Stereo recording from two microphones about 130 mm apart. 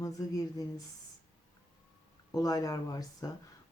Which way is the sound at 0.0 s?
25° left (ahead or behind).